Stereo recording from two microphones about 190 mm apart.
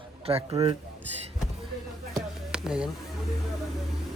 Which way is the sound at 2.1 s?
5° right (ahead or behind).